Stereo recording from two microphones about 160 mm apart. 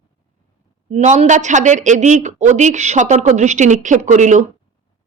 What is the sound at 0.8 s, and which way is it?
Speech, 45° right (ahead or behind).